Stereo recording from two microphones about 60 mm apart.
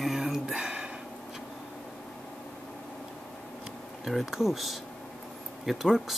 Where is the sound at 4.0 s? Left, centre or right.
Centre.